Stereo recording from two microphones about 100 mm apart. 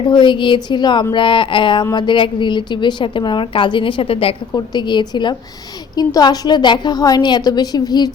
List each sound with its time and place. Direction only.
0.1 s speech: 55° left (ahead or behind); by 4.4 s 70° left (ahead or behind)
4.5 s speech: 45° left (ahead or behind)